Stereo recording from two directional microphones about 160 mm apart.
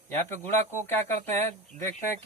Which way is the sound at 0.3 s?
50° right (ahead or behind).